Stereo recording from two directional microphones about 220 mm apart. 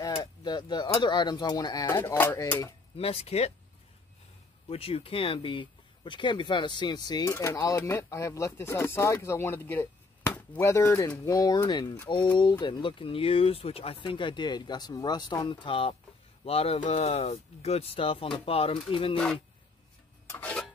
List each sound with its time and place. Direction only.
0.0 s speech: 20° left (ahead or behind)
3.0 s speech: 25° left (ahead or behind)
4.6 s speech: 25° left (ahead or behind)
20.2 s a sound: 10° left (ahead or behind)